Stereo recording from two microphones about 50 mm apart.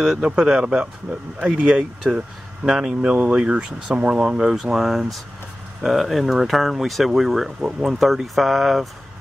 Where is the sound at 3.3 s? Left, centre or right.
Right; by 8.8 s centre.